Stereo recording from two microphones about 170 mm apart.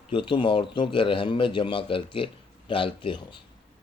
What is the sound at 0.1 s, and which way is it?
Speech, 30° left (ahead or behind).